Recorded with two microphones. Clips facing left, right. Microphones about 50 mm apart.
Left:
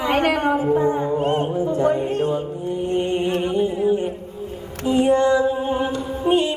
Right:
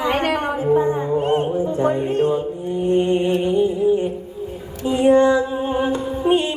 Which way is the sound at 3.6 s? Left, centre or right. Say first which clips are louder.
Right 2 dB; left.